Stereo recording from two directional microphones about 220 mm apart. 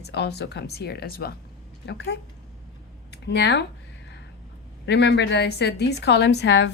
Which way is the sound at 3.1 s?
50° left (ahead or behind).